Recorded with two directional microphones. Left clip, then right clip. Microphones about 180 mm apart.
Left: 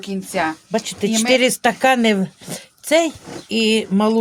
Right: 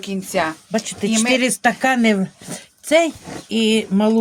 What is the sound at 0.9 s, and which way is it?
Speech, 20° left (ahead or behind).